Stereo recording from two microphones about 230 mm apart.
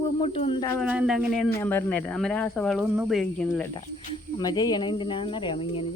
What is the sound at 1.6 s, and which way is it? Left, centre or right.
Speech, centre.